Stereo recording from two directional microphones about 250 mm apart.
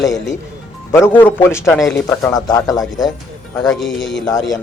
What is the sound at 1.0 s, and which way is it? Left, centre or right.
Speech, centre.